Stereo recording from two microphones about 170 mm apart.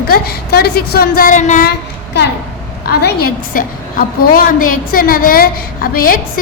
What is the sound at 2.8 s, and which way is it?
A woman's voice, 65° left (ahead or behind).